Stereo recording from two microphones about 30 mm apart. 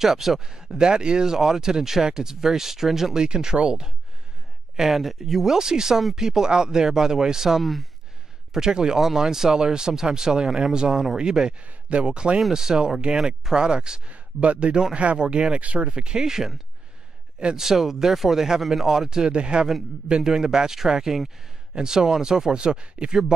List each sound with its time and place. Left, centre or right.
0.0 s speech: centre
0.4 s speech: right
3.2 s speech: right
4.7 s speech: centre
5.5 s speech: centre
7.6 s speech: centre
8.5 s speech: right
11.6 s speech: right
12.5 s speech: right
14.0 s speech: right
14.7 s speech: right
16.3 s speech: centre
17.6 s speech: centre; by 23.1 s right